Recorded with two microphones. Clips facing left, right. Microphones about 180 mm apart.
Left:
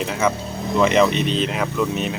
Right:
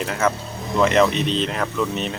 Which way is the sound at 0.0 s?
Centre (ahead or behind).